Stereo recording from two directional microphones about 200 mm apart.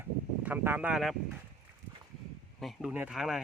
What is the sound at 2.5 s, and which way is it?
Speech, centre (ahead or behind).